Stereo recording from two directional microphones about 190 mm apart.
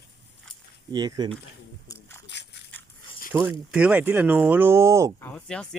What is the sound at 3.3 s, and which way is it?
Speech, 10° right (ahead or behind).